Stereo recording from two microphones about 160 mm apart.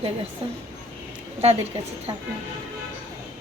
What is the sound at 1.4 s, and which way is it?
Speech, 40° right (ahead or behind).